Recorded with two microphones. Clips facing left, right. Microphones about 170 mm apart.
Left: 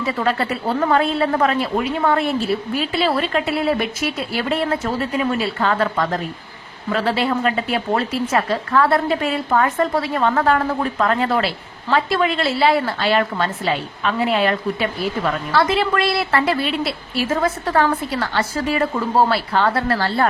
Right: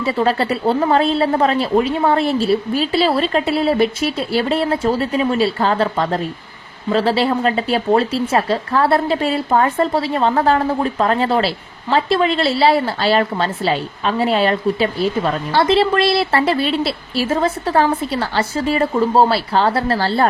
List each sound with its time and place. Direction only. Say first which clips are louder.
0.0 s speech: right 3 dB; 30° right (ahead or behind)